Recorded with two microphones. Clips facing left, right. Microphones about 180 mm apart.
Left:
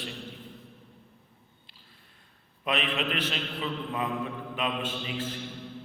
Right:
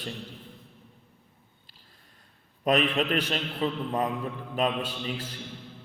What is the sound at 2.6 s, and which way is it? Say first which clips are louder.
A man's voice: right 6 dB; 45° right (ahead or behind).